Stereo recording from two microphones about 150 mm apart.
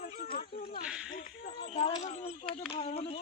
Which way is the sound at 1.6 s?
50° left (ahead or behind).